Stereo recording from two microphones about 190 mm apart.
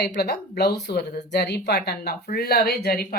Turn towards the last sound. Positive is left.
turn(degrees=55)  # may be behind; listen again after turning